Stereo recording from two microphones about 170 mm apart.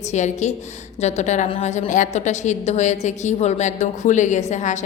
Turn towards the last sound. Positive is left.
turn(degrees=45)  # may be behind; listen again after turning